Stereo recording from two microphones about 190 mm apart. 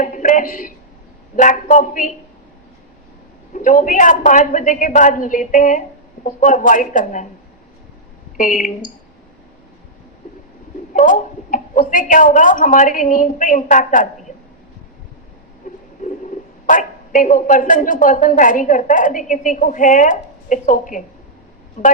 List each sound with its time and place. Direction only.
0.0 s a sound: 40° left (ahead or behind)
1.4 s speech: 40° left (ahead or behind)
3.5 s speech: 45° left (ahead or behind)
8.4 s speech: 45° left (ahead or behind)
10.9 s a woman's voice: 45° left (ahead or behind)
16.6 s speech: 45° left (ahead or behind)